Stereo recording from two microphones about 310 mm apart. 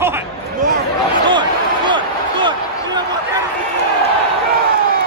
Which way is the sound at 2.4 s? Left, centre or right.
Centre.